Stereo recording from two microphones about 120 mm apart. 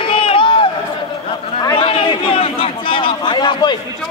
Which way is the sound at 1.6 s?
35° left (ahead or behind).